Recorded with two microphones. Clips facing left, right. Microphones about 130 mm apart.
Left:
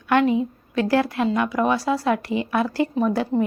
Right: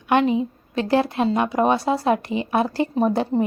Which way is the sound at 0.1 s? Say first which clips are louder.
Even; 20° right (ahead or behind).